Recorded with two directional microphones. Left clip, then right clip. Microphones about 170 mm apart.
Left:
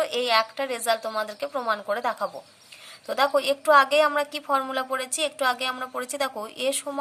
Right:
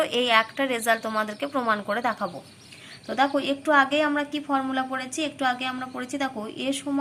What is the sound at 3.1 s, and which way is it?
A woman's voice, 50° left (ahead or behind).